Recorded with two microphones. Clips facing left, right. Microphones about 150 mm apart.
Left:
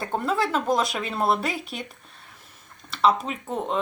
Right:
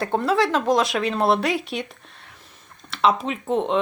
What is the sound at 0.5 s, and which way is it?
Speech, centre (ahead or behind).